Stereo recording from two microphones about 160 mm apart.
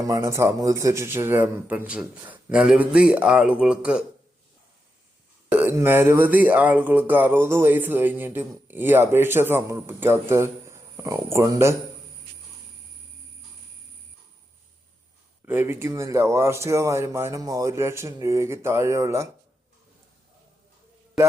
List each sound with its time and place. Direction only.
0.0 s speech: 20° right (ahead or behind)
5.5 s speech: 15° right (ahead or behind)
15.4 s speech: 15° right (ahead or behind)